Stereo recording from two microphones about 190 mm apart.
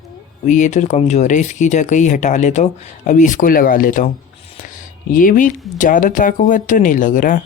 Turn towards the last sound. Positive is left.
turn(degrees=45)  # may be behind; listen again after turning